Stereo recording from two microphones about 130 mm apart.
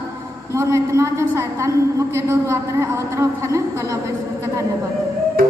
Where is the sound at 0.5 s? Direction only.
20° right (ahead or behind).